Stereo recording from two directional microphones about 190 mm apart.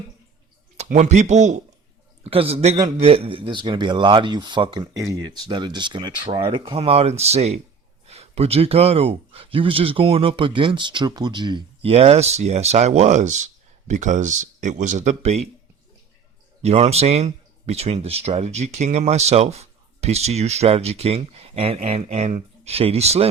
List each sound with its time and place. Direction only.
0.8 s speech: 35° right (ahead or behind)
16.6 s speech: 35° right (ahead or behind)